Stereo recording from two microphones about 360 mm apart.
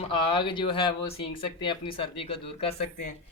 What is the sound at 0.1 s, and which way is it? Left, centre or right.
Speech, centre.